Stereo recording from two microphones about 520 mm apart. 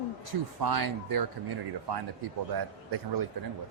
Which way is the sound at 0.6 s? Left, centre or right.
Right.